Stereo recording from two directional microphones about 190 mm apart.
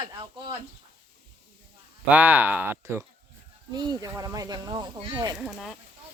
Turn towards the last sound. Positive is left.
turn(degrees=0)  # may be behind; listen again after turning